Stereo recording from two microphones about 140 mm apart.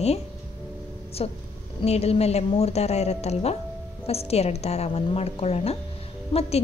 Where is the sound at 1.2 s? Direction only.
45° left (ahead or behind).